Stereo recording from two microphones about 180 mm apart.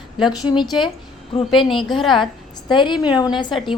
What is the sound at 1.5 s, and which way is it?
Speech, centre (ahead or behind).